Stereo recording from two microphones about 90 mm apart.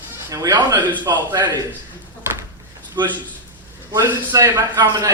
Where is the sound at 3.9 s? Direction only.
40° right (ahead or behind).